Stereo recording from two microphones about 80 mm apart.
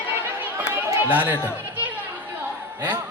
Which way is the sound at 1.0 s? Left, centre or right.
Right.